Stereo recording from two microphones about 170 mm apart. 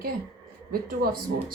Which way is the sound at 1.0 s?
60° right (ahead or behind).